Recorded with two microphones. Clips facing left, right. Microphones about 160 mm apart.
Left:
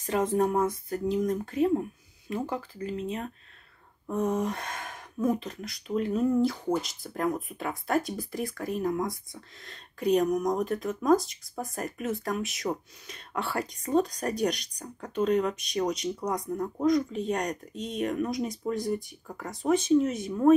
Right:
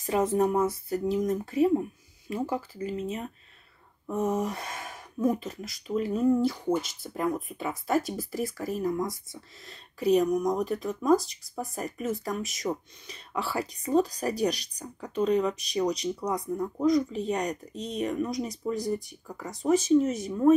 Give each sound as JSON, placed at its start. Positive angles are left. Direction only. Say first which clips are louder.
{"t": 0.4, "sound": "speech", "louder": "right 1 dB", "side_deg": -5}